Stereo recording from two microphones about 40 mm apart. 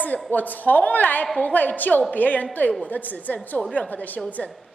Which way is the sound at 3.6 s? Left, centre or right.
Left.